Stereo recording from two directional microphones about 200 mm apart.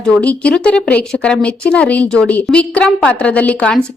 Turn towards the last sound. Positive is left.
turn(degrees=5)  # may be behind; listen again after turning